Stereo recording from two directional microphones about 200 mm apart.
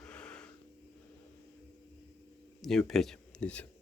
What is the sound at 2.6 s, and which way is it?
Speech, centre (ahead or behind).